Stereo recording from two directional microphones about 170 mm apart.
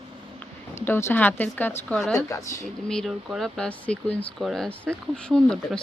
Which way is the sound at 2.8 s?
Centre (ahead or behind).